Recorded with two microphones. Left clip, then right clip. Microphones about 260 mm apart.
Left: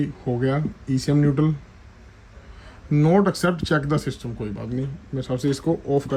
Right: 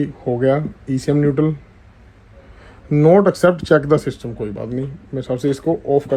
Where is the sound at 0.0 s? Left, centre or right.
Centre.